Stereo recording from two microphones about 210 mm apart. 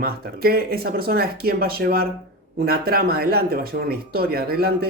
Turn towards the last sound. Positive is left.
turn(degrees=-45)  # may be behind; listen again after turning